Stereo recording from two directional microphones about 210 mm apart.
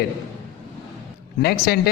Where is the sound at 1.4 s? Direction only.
50° left (ahead or behind).